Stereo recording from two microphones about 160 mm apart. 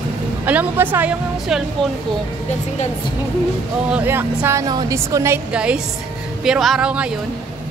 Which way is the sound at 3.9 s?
10° right (ahead or behind).